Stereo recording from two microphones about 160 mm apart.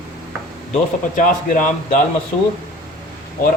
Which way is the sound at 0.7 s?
55° left (ahead or behind).